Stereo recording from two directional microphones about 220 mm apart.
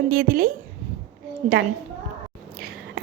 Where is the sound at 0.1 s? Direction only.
40° right (ahead or behind).